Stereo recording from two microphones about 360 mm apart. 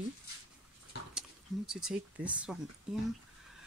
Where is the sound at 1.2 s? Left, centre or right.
Centre.